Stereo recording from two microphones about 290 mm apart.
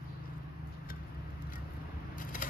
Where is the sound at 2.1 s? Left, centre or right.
Left.